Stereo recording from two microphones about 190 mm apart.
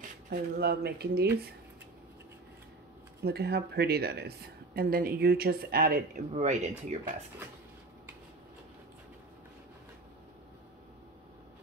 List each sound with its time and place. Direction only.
0.3 s speech: 55° right (ahead or behind)
3.3 s a woman's voice: 55° right (ahead or behind); by 7.0 s 35° right (ahead or behind)